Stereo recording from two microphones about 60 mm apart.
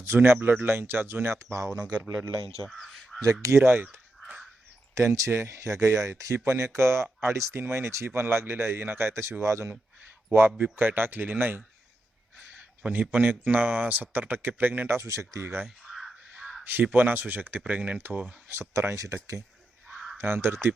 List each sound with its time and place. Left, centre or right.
0.0 s speech: right
2.6 s crow: centre
3.4 s speech: right
4.9 s speech: right
9.4 s speech: right
10.6 s speech: right
15.0 s speech: right
15.6 s a sound: centre
16.6 s speech: right
18.6 s speech: right
19.9 s a sound: centre
20.1 s speech: right